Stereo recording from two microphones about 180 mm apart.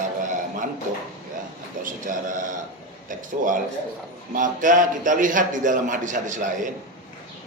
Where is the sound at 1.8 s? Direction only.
45° right (ahead or behind).